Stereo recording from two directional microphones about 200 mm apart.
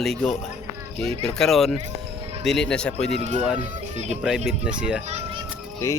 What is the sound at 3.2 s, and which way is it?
Speech, 35° right (ahead or behind).